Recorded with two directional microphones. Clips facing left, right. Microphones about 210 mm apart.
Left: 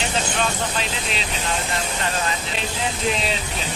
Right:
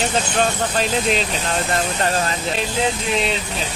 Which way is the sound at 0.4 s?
45° right (ahead or behind).